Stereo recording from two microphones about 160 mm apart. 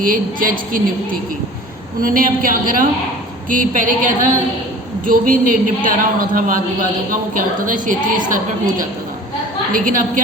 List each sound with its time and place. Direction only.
0.0 s a man's voice: 60° right (ahead or behind)
2.0 s a man's voice: 60° right (ahead or behind)
9.7 s a man's voice: 60° right (ahead or behind)